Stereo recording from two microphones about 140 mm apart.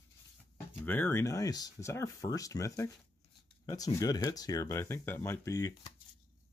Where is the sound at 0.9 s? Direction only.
15° left (ahead or behind).